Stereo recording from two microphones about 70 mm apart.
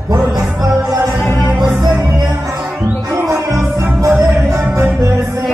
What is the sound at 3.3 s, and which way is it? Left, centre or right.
Music, right.